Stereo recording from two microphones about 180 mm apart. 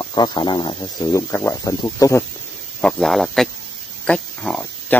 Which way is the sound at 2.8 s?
Centre (ahead or behind).